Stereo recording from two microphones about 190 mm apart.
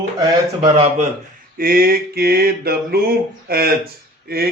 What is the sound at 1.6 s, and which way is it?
Speech, 50° right (ahead or behind).